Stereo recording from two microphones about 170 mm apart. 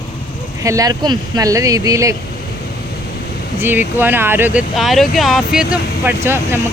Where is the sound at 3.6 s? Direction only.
10° right (ahead or behind).